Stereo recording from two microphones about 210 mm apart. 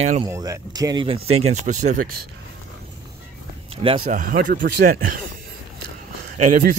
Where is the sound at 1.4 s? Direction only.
35° right (ahead or behind).